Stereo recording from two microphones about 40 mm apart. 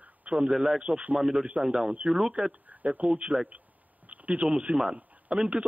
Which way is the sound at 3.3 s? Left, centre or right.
Right.